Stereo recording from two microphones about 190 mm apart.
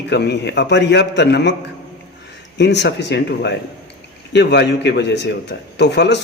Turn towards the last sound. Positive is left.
turn(degrees=65)  # may be behind; listen again after turning